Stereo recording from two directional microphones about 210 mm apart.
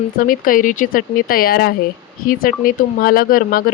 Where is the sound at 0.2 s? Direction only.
40° left (ahead or behind).